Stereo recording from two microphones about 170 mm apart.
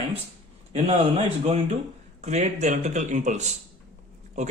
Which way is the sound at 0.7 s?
40° right (ahead or behind).